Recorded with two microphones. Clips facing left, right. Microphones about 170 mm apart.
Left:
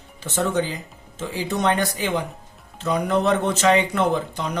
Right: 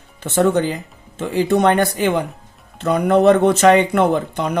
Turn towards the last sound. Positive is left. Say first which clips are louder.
# right 5 dB
turn(degrees=-60)  # may be behind; listen again after turning